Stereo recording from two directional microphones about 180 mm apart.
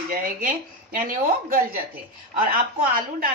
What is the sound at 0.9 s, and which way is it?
A woman's voice, 50° right (ahead or behind).